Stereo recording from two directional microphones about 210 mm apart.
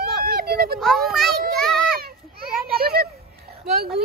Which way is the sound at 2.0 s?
45° right (ahead or behind).